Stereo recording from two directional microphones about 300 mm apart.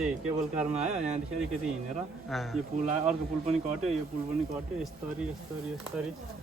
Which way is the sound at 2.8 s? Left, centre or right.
Right.